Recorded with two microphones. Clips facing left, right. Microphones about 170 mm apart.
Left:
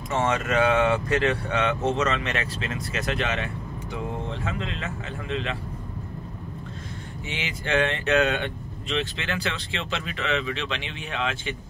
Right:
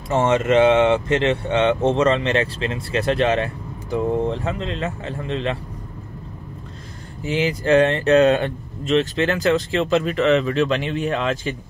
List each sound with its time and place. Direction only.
0.1 s speech: 30° right (ahead or behind)
7.2 s speech: 35° right (ahead or behind)